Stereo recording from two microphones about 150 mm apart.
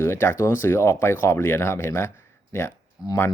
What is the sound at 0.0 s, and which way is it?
Speech, 15° left (ahead or behind).